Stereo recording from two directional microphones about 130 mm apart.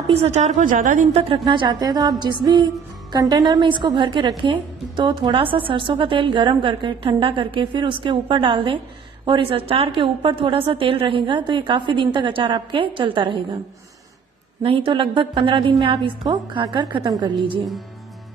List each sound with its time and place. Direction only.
0.1 s a woman's voice: 55° right (ahead or behind); by 1.0 s 90° right
1.4 s music: 35° right (ahead or behind)
14.6 s music: 40° right (ahead or behind)